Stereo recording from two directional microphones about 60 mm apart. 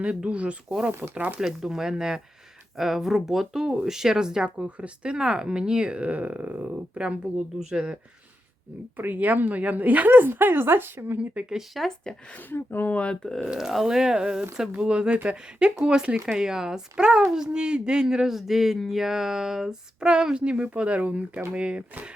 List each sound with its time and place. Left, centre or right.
0.0 s speech: centre
1.4 s speech: centre
9.0 s a woman's voice: right
11.2 s speech: centre
11.7 s speech: centre
12.5 s speech: left
12.9 s speech: centre
13.6 s speech: centre